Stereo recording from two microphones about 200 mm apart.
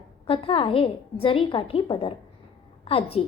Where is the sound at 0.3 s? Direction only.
25° left (ahead or behind).